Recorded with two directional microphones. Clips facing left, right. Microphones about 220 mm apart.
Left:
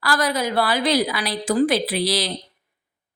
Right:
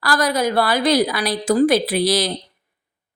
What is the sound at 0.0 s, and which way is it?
Speech, 40° right (ahead or behind).